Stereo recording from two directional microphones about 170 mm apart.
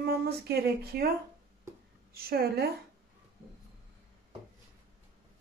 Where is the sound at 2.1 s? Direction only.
65° right (ahead or behind).